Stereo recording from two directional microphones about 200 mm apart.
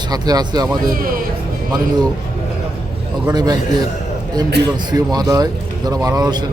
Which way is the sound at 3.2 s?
20° right (ahead or behind).